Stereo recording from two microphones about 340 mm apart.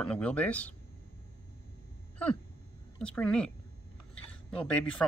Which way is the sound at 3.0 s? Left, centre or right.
Centre.